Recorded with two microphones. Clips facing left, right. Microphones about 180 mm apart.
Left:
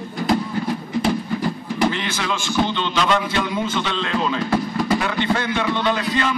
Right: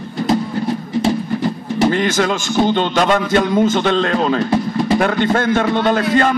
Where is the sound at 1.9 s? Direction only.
45° right (ahead or behind).